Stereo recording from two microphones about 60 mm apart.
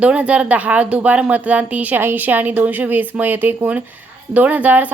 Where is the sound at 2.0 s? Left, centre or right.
Right.